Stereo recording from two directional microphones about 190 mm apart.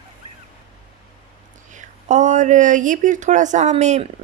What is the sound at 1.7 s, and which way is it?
Speech, 40° right (ahead or behind).